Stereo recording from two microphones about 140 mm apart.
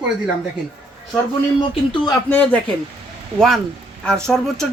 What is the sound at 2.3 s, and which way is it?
Speech, 10° left (ahead or behind).